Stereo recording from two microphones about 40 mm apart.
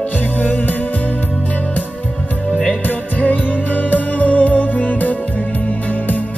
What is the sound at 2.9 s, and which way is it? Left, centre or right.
Music, left.